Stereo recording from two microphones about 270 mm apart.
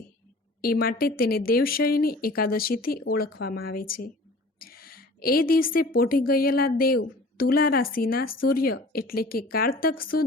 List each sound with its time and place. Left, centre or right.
0.6 s a woman's voice: left